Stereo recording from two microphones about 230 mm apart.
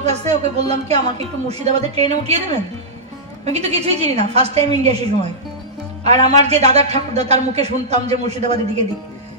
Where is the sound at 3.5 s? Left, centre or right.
Right.